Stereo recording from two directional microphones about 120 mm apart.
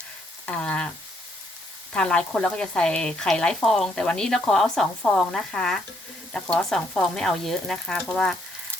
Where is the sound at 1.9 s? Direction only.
10° left (ahead or behind).